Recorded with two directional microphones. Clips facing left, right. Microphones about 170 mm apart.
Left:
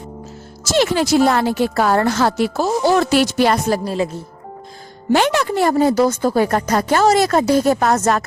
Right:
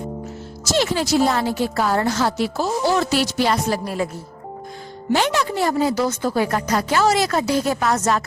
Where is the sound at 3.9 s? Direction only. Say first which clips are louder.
Left 4 dB; 25° left (ahead or behind).